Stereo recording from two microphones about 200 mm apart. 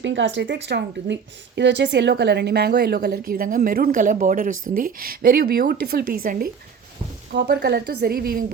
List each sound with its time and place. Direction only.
0.0 s a woman's voice: 65° right (ahead or behind); by 8.4 s 45° right (ahead or behind)